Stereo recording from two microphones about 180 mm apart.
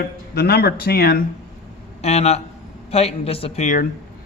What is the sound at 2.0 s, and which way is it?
A woman's voice, 35° left (ahead or behind).